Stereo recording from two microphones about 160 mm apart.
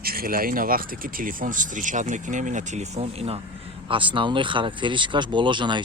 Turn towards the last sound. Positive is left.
turn(degrees=-30)  # may be behind; listen again after turning